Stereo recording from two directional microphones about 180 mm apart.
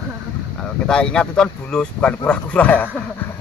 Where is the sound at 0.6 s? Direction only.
5° left (ahead or behind).